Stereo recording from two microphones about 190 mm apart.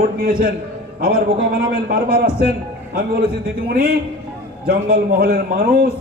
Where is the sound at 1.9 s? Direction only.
50° right (ahead or behind).